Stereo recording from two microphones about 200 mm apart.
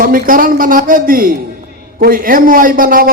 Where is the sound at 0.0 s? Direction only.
45° right (ahead or behind).